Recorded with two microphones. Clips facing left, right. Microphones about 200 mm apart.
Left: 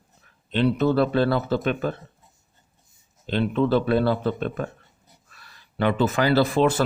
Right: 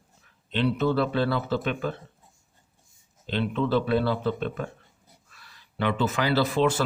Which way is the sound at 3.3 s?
45° left (ahead or behind).